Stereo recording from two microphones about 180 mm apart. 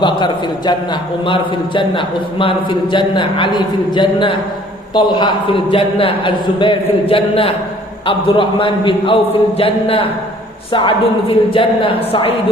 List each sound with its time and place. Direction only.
0.0 s a man's voice: 25° left (ahead or behind)
9.6 s a sound: 30° left (ahead or behind)
10.7 s a man's voice: 30° left (ahead or behind)